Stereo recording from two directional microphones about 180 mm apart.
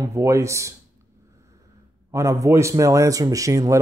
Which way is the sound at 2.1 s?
15° right (ahead or behind).